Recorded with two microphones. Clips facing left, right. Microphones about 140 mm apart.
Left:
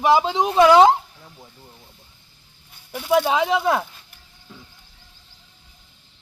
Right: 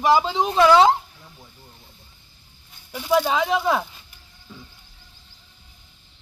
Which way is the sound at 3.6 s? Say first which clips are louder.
Left 1 dB; centre (ahead or behind).